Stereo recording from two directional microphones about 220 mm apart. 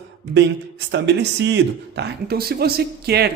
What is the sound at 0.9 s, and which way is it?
Speech, 50° right (ahead or behind).